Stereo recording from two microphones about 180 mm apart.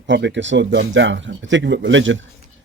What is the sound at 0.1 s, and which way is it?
A man's voice, 85° right.